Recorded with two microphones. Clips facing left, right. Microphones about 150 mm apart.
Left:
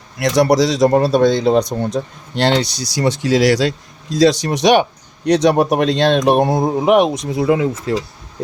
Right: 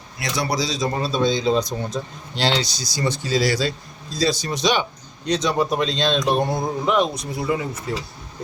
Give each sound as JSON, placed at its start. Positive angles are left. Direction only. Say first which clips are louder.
{"t": 0.2, "sound": "speech", "louder": "left 11 dB", "side_deg": 85}
{"t": 0.9, "sound": "speech", "louder": "left 8 dB", "side_deg": 65}